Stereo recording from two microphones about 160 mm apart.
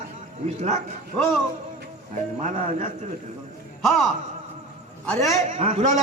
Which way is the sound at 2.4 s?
50° right (ahead or behind).